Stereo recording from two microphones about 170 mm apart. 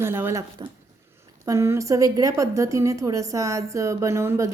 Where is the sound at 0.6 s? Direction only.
25° right (ahead or behind).